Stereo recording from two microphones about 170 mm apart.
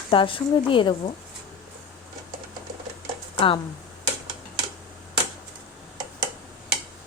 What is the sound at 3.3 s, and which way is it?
Speech, 30° left (ahead or behind).